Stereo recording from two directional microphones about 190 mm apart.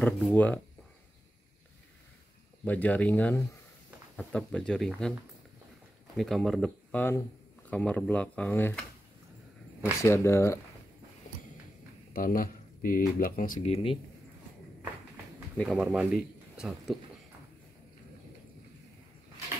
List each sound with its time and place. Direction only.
0.0 s speech: 5° left (ahead or behind)
2.6 s speech: 10° left (ahead or behind)
6.1 s speech: centre (ahead or behind)
10.0 s speech: 15° left (ahead or behind)
12.1 s speech: 50° left (ahead or behind)
15.5 s speech: 5° left (ahead or behind)